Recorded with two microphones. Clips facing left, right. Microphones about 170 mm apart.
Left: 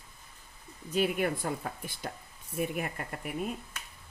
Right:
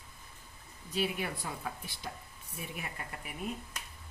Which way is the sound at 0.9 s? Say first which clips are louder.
Left 6 dB; 50° left (ahead or behind).